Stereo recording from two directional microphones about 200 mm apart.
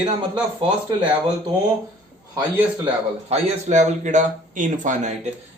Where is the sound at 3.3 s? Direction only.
35° right (ahead or behind).